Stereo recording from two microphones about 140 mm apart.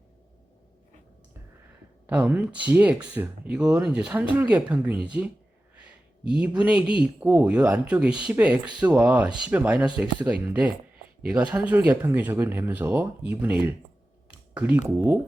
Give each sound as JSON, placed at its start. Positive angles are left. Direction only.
{"t": 2.0, "sound": "speech", "side_deg": -10}